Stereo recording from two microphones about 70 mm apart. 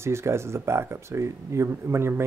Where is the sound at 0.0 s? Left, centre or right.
Right.